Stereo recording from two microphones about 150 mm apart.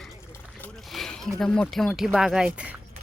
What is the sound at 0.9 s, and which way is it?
Speech, centre (ahead or behind).